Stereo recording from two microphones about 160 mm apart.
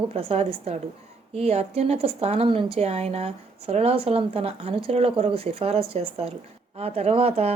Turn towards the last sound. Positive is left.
turn(degrees=-40)  # may be behind; listen again after turning